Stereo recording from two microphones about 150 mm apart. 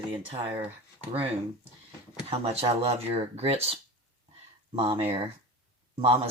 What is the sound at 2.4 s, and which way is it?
Speech, 40° right (ahead or behind).